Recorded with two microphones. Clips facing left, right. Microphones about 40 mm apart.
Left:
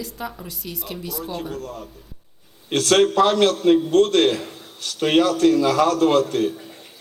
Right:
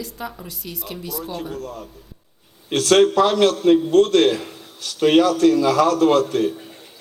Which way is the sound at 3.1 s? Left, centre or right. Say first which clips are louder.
Even; centre.